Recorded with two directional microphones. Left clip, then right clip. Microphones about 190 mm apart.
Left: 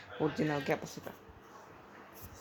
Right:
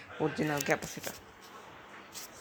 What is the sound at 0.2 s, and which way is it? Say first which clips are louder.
Speech: right 1 dB; 5° left (ahead or behind).